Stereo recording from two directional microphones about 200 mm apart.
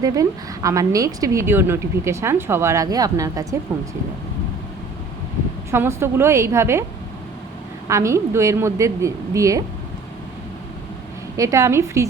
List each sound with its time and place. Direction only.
0.0 s a woman's voice: 15° right (ahead or behind)
5.7 s a woman's voice: 10° right (ahead or behind)
7.9 s a woman's voice: 15° right (ahead or behind)
11.3 s a woman's voice: 15° right (ahead or behind)